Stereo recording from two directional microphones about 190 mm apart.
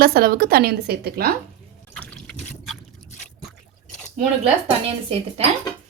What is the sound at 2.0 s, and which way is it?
Boat, centre (ahead or behind).